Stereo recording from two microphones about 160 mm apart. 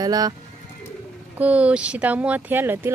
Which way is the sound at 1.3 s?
10° right (ahead or behind).